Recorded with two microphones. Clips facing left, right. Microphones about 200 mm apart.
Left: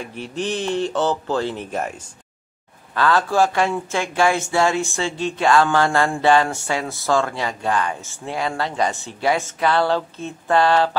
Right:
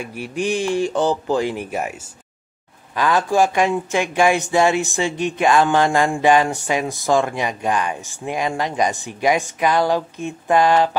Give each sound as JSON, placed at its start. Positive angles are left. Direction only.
{"t": 0.0, "sound": "speech", "side_deg": -10}